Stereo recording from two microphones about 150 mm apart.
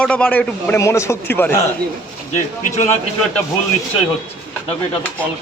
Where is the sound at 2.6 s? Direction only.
55° left (ahead or behind).